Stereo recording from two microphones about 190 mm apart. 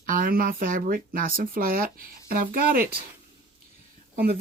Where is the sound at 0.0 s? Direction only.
45° right (ahead or behind).